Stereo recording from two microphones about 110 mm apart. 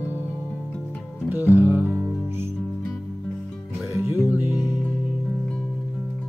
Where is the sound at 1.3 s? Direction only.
20° right (ahead or behind).